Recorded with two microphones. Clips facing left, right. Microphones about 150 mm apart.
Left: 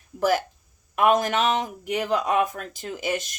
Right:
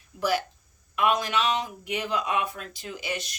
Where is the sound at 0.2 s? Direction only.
50° left (ahead or behind).